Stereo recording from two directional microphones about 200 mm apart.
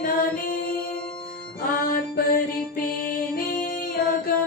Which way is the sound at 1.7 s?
45° left (ahead or behind).